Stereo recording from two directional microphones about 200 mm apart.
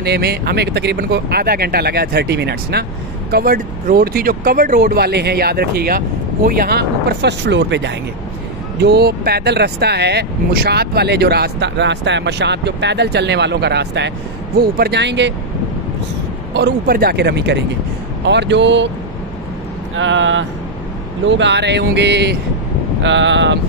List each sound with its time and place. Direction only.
0.0 s speech: 55° right (ahead or behind)
16.5 s speech: 50° right (ahead or behind)
20.0 s speech: 70° right (ahead or behind)